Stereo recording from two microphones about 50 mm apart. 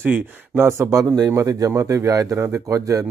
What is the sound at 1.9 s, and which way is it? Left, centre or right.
Speech, right.